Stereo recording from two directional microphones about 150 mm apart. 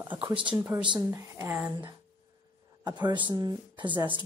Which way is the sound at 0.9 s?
15° right (ahead or behind).